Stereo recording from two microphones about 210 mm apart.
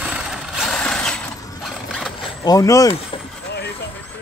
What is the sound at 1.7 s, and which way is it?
Mechanisms, centre (ahead or behind).